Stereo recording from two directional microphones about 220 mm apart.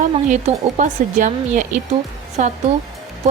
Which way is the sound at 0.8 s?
35° right (ahead or behind).